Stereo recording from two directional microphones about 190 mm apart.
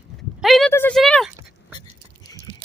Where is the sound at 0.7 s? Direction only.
10° left (ahead or behind).